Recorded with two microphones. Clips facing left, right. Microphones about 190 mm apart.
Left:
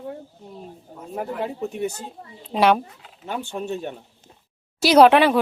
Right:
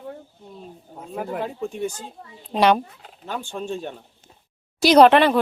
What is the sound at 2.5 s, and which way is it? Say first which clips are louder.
Speech: even; 5° left (ahead or behind).